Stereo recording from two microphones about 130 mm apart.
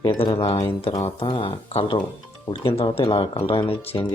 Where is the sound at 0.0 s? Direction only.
35° left (ahead or behind).